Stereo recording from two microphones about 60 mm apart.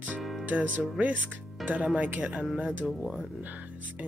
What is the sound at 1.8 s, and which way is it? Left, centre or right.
Speech, right.